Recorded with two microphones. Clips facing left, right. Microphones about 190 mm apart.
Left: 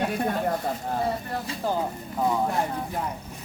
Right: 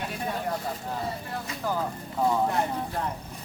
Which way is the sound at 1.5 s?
25° left (ahead or behind).